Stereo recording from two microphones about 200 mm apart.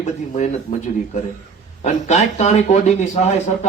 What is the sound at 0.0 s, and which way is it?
Speech, 35° left (ahead or behind).